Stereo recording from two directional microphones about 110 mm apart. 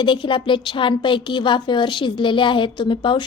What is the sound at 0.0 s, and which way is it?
A woman's voice, 50° left (ahead or behind).